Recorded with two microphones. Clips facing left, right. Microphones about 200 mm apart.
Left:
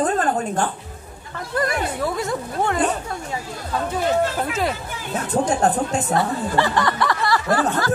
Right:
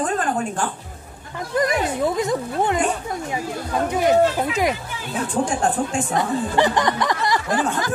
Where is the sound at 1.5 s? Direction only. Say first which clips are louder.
Right 2 dB; 20° right (ahead or behind).